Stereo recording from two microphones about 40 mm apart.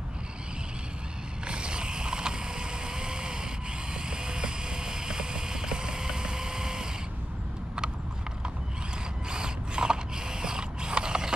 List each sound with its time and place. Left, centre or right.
1.5 s mechanisms: right
3.9 s vehicle: centre
9.3 s mechanisms: centre